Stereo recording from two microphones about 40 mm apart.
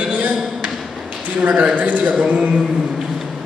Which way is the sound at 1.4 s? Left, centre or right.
Right.